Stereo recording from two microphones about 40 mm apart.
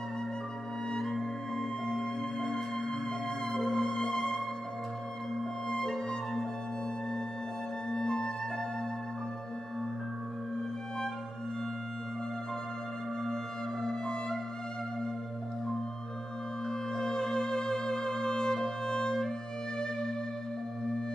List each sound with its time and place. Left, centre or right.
0.9 s music: centre
7.9 s music: centre
13.8 s music: centre
16.6 s music: centre